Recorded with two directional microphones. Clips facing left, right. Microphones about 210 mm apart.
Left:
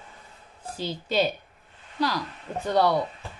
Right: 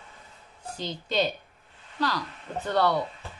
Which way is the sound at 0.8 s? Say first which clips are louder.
Left 2 dB; 10° left (ahead or behind).